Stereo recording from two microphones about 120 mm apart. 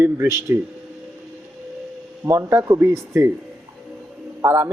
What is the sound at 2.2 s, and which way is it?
Speech, 20° right (ahead or behind).